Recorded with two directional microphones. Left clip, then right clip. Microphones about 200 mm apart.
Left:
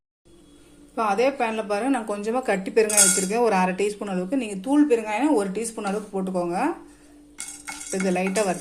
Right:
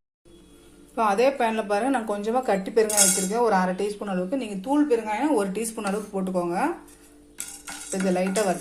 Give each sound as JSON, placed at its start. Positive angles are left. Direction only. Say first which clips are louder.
{"t": 0.9, "sound": "speech", "louder": "right 1 dB", "side_deg": 10}
{"t": 7.9, "sound": "speech", "louder": "even", "side_deg": 15}